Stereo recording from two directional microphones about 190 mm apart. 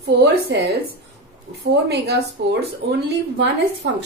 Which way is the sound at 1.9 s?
60° right (ahead or behind).